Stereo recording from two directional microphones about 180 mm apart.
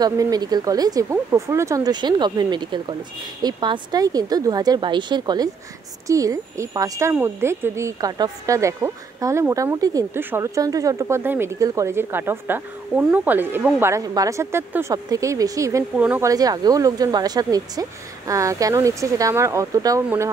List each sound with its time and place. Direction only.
0.0 s speech: 20° right (ahead or behind)